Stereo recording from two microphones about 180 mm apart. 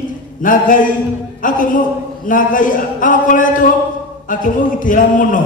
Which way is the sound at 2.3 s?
50° left (ahead or behind).